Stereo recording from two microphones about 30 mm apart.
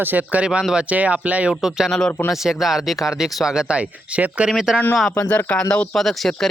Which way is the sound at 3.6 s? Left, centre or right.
Right.